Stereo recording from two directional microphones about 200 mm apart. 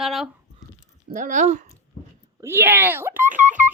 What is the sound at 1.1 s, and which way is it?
Speech, 40° right (ahead or behind).